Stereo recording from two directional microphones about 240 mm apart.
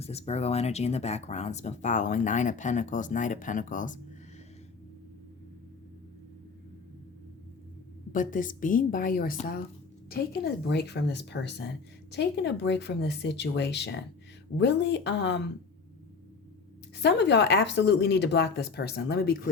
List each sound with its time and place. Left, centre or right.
0.0 s speech: left
8.1 s speech: left
16.9 s speech: left